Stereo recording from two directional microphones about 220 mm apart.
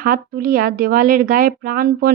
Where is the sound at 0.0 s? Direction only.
40° right (ahead or behind).